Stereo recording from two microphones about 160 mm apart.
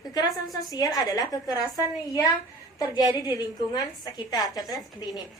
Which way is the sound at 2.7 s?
20° left (ahead or behind).